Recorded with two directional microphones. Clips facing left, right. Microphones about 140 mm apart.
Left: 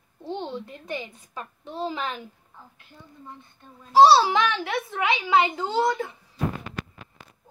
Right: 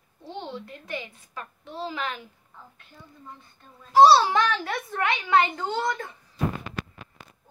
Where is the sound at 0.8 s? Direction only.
20° left (ahead or behind).